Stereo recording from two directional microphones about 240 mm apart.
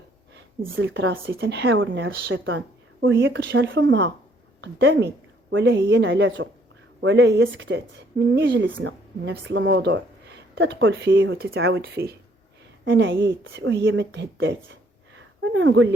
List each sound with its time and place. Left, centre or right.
0.8 s a woman's voice: right